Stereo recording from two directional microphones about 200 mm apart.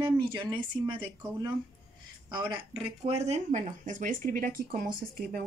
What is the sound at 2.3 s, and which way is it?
Speech, 25° right (ahead or behind).